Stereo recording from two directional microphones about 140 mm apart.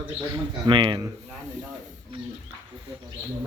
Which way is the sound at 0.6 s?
35° right (ahead or behind).